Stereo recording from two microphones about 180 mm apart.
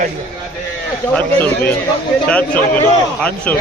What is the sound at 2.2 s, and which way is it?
A man's voice, 5° left (ahead or behind).